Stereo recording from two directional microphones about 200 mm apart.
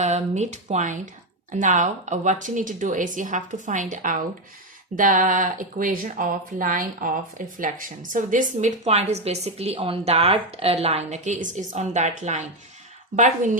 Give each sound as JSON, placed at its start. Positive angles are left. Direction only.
{"t": 0.0, "sound": "speech", "side_deg": -35}